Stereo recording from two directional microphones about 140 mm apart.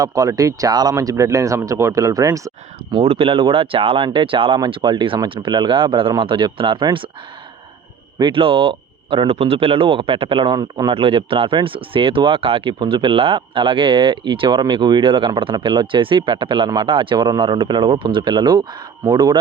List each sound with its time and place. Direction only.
0.0 s speech: 25° right (ahead or behind)
3.0 s speech: 45° right (ahead or behind)
8.2 s speech: 40° right (ahead or behind)
11.0 s speech: 40° right (ahead or behind)